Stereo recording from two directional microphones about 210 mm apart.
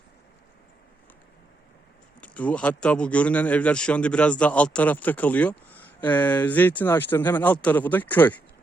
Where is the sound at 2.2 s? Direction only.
5° left (ahead or behind).